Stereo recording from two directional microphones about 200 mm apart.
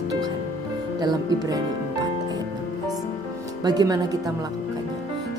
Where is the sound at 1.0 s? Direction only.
20° right (ahead or behind).